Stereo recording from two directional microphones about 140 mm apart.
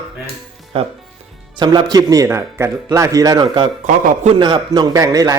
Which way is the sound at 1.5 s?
30° right (ahead or behind).